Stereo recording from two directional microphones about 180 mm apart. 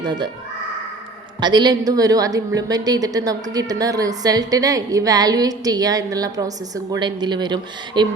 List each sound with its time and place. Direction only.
1.4 s a woman's voice: 25° right (ahead or behind)